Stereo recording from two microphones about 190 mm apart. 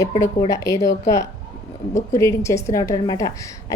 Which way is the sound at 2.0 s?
15° left (ahead or behind).